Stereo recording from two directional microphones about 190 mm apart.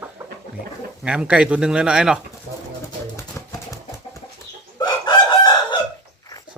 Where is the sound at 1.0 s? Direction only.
5° right (ahead or behind).